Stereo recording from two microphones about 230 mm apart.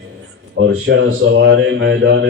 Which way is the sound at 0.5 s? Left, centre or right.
Right.